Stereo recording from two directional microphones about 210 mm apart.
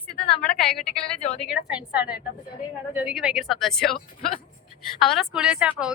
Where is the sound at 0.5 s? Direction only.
5° left (ahead or behind).